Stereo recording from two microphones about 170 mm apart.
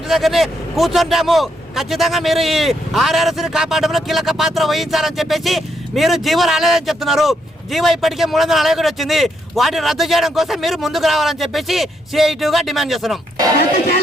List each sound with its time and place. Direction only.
0.1 s a man's voice: centre (ahead or behind)
13.6 s speech: 65° left (ahead or behind)